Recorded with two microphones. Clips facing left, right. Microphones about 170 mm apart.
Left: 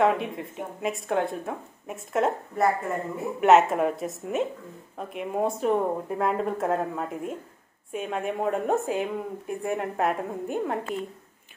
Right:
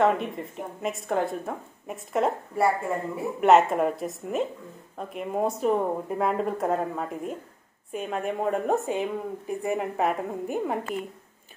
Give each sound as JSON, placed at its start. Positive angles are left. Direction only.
{"t": 0.0, "sound": "speech", "side_deg": 0}